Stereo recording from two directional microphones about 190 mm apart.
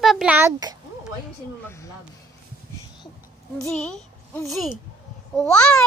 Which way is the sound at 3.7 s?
5° left (ahead or behind).